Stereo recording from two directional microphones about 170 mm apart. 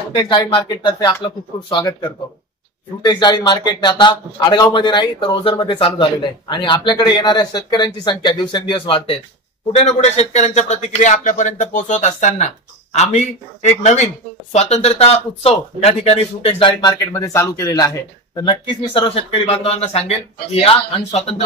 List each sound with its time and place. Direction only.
0.1 s a man's voice: 25° left (ahead or behind)
17.1 s speech: 15° left (ahead or behind); by 21.4 s 35° left (ahead or behind)